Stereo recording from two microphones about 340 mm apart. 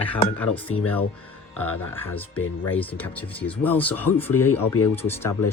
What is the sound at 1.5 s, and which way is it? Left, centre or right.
Speech, left.